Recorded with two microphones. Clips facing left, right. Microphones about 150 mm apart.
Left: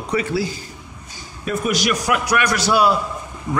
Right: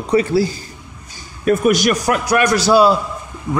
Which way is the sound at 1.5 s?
55° right (ahead or behind).